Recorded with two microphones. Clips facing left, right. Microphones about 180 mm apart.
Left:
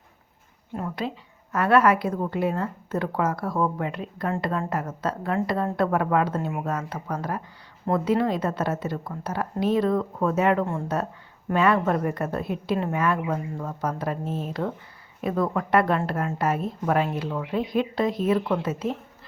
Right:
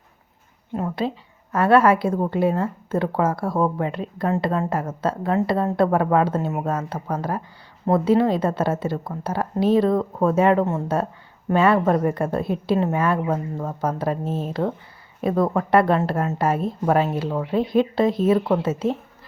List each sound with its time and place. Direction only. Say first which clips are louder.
0.9 s a woman's voice: right 4 dB; 30° right (ahead or behind)